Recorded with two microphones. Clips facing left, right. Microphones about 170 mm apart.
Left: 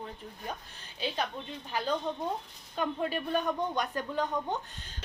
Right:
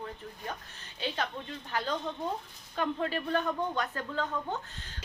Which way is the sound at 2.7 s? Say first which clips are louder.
Even; 15° left (ahead or behind).